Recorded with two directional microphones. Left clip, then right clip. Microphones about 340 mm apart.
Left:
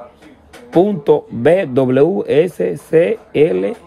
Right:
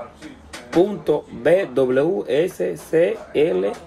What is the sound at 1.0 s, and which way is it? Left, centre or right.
Speech, centre.